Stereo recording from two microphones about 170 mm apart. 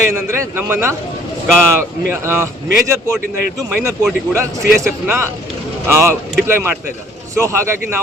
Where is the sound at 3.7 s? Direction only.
10° right (ahead or behind).